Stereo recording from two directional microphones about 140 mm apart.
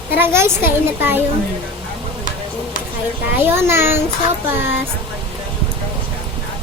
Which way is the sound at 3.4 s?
20° right (ahead or behind).